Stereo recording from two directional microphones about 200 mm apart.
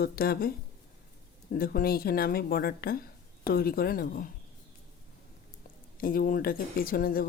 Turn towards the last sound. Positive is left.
turn(degrees=45)  # may be behind; listen again after turning